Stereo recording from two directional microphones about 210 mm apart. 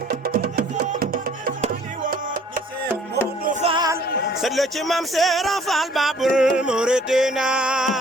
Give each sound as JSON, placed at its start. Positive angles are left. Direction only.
{"t": 0.4, "sound": "music", "side_deg": -45}
{"t": 3.4, "sound": "music", "side_deg": -35}
{"t": 4.4, "sound": "speech", "side_deg": 0}